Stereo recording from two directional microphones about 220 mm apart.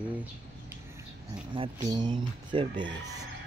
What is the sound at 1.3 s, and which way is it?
Speech, 20° right (ahead or behind).